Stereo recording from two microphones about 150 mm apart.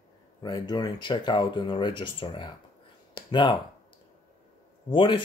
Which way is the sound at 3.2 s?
30° left (ahead or behind).